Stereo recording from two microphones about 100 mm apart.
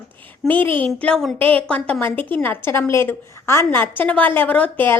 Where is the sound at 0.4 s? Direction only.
5° left (ahead or behind).